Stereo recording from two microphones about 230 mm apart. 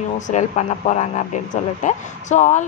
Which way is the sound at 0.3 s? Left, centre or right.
Left.